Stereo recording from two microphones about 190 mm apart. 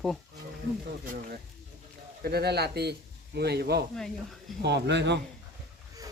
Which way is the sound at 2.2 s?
55° right (ahead or behind).